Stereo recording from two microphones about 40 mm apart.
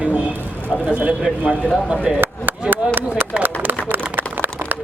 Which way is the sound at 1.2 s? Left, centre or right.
Right.